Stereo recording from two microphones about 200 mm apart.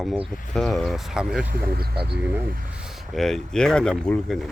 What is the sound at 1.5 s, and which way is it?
Speech, 50° right (ahead or behind).